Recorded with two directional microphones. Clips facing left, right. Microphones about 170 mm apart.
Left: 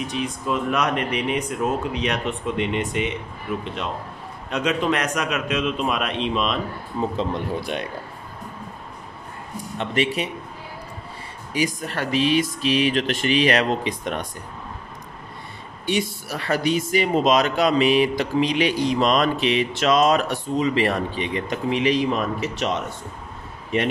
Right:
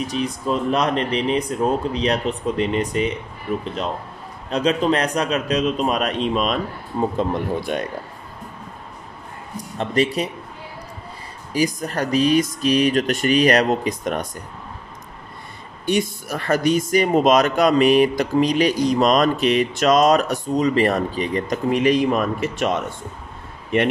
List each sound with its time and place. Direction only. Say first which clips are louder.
0.0 s speech: right 3 dB; 35° right (ahead or behind)
9.8 s speech: right 3 dB; 35° right (ahead or behind)
11.5 s speech: right 3 dB; 40° right (ahead or behind)
15.9 s speech: right 3 dB; 50° right (ahead or behind)